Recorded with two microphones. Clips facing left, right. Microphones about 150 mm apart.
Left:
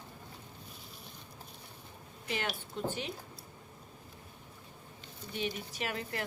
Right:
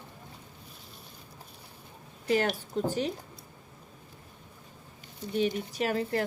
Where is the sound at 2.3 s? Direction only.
40° right (ahead or behind).